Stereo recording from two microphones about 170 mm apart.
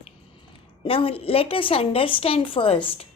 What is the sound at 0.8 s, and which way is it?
Speech, 35° left (ahead or behind).